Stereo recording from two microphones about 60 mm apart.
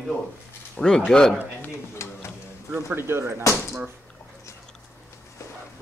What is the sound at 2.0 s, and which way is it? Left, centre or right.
Speech, left.